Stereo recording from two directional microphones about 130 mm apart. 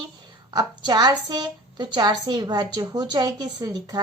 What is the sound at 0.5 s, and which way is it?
A woman's voice, 35° right (ahead or behind).